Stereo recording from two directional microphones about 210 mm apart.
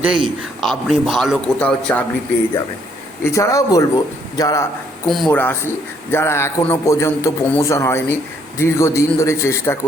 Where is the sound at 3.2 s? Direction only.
15° left (ahead or behind).